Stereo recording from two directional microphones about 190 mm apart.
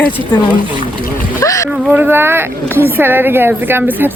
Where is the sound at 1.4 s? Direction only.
15° left (ahead or behind).